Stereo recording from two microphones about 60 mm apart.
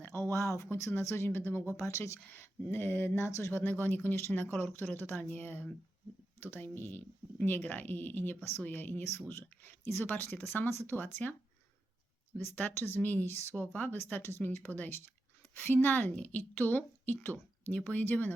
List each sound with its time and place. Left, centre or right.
0.1 s speech: left
0.9 s speech: left
1.7 s speech: left
2.4 s speech: left
3.5 s speech: left
4.6 s speech: left
9.8 s speech: left
10.1 s speech: left
12.5 s a woman's voice: left